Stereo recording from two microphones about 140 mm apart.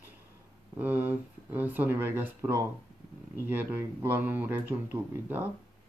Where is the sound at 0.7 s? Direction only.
10° right (ahead or behind).